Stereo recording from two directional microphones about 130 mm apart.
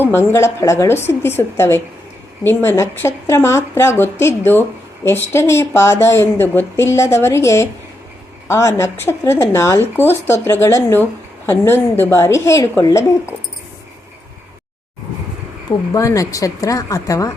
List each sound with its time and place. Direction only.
0.0 s speech: 15° left (ahead or behind)
15.9 s speech: 25° left (ahead or behind)